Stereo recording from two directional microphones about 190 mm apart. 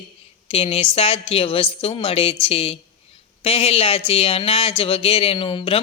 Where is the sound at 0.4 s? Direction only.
30° left (ahead or behind).